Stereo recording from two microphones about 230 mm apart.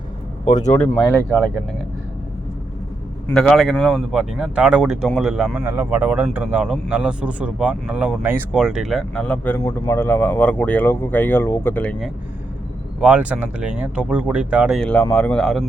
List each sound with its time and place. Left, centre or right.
0.4 s speech: left
0.9 s speech: centre
3.2 s speech: centre